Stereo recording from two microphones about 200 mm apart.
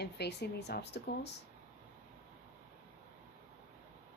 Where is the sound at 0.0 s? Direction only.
55° left (ahead or behind).